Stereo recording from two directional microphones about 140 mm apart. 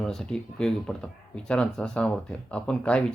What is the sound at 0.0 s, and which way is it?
Speech, 5° left (ahead or behind).